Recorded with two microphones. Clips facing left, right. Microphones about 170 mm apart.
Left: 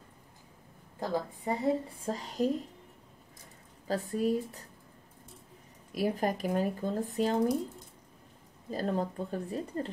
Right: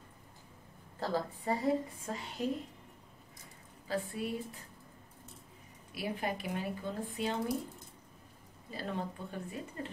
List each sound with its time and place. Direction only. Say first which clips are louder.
0.9 s a woman's voice: left 2 dB; 15° left (ahead or behind)
2.0 s speech: left 10 dB; 35° left (ahead or behind)
3.8 s speech: left 6 dB; 40° left (ahead or behind)
5.9 s speech: left 7 dB; 40° left (ahead or behind)
8.6 s speech: left 7 dB; 40° left (ahead or behind)